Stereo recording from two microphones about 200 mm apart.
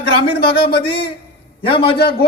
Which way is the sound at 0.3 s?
50° left (ahead or behind).